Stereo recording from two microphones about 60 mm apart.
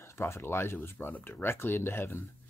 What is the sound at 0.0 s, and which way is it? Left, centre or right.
Speech, left.